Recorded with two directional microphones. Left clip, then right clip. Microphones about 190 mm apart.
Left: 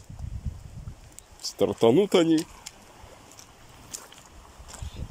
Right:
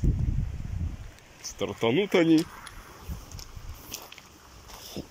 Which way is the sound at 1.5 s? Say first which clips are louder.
Left 6 dB; 20° left (ahead or behind).